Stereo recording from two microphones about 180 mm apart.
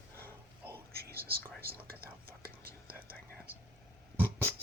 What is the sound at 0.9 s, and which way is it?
Whispering, 60° right (ahead or behind).